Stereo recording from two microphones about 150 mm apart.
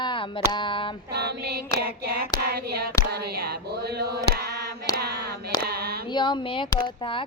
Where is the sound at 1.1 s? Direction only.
90° right.